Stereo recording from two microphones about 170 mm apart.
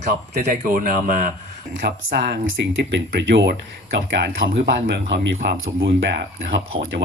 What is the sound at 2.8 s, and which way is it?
Speech, 90° right.